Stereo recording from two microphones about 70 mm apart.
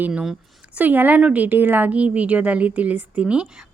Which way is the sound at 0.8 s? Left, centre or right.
Right.